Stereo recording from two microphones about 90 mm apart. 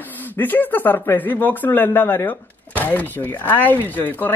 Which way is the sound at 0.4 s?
20° left (ahead or behind).